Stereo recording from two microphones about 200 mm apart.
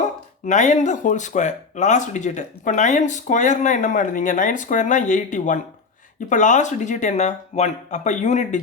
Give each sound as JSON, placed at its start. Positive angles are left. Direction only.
{"t": 0.4, "sound": "speech", "side_deg": 35}